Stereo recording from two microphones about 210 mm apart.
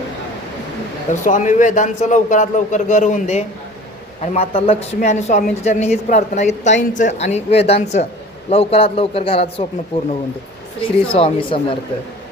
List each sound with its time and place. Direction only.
1.1 s a woman's voice: 35° left (ahead or behind)
10.8 s a man's voice: 25° left (ahead or behind)